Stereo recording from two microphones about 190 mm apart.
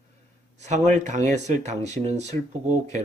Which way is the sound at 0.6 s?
40° right (ahead or behind).